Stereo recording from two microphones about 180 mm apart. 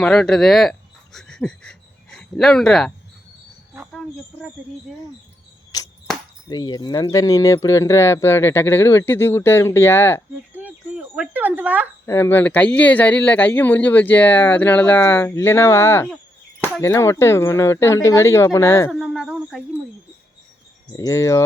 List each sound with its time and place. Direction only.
0.0 s speech: 5° left (ahead or behind)
5.7 s cricket: 20° left (ahead or behind)
6.5 s speech: 20° left (ahead or behind)
10.5 s a sound: 10° right (ahead or behind)
12.0 s speech: 15° left (ahead or behind)
18.9 s speech: 5° right (ahead or behind)
20.9 s speech: 15° left (ahead or behind)